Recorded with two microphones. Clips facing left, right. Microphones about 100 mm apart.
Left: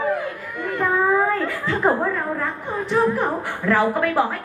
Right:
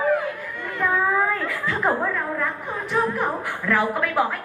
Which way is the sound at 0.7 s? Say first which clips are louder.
Left 2 dB; 20° left (ahead or behind).